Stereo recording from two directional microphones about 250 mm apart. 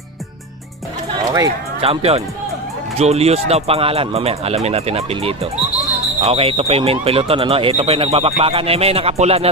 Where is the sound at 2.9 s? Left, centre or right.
Right.